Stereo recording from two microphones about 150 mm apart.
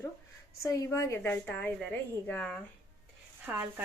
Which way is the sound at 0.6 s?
20° left (ahead or behind).